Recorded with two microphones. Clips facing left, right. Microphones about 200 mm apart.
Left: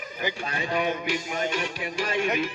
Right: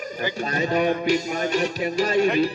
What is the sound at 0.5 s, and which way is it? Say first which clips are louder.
A man's voice: right 7 dB; 40° right (ahead or behind).